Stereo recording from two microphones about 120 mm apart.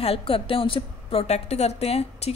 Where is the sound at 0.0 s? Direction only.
50° left (ahead or behind).